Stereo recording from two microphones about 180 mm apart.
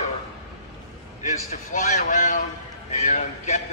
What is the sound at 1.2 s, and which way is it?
A man's voice, 40° left (ahead or behind).